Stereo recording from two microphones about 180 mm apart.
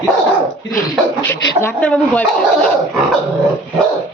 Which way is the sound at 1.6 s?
10° left (ahead or behind).